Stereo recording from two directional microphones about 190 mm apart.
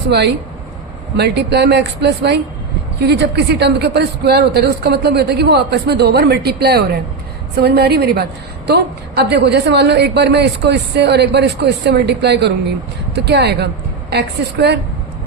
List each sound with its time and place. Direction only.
0.1 s a woman's voice: 60° right (ahead or behind)